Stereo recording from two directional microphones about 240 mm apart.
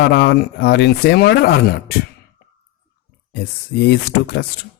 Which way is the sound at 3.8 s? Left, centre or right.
Left.